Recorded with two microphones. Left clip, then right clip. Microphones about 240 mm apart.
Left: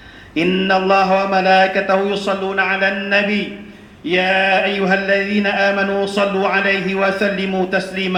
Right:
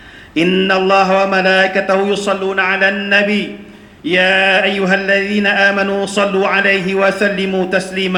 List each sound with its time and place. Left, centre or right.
0.3 s mantra: right